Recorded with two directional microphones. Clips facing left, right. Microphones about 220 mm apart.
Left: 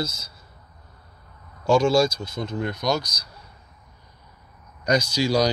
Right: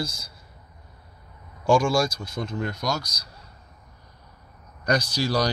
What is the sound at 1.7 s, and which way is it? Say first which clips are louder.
Speech: left 2 dB; 25° left (ahead or behind).